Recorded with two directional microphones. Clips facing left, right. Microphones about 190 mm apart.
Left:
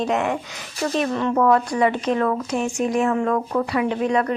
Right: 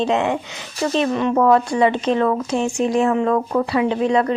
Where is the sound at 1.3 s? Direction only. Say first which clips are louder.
Right 2 dB; 30° right (ahead or behind).